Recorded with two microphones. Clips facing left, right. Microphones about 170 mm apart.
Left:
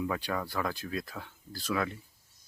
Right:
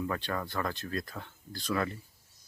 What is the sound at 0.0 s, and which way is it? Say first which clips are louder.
Speech: left 1 dB; 10° left (ahead or behind).